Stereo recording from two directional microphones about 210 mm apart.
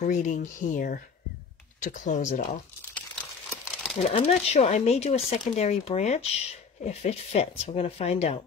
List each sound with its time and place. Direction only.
0.0 s speech: 35° left (ahead or behind)
3.7 s a sound: centre (ahead or behind)
4.1 s speech: 30° left (ahead or behind)